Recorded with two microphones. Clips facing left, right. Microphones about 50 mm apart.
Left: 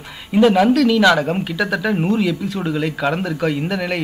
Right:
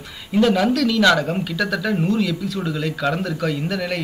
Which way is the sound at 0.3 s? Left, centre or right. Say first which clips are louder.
Left 4 dB; centre.